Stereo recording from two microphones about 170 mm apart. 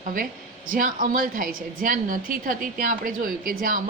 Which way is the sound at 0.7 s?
55° right (ahead or behind).